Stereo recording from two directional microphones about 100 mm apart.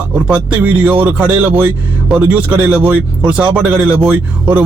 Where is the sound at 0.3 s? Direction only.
15° right (ahead or behind).